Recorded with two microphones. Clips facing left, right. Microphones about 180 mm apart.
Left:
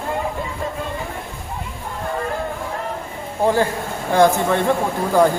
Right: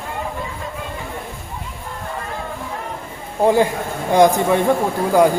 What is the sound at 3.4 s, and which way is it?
Speech, 15° right (ahead or behind).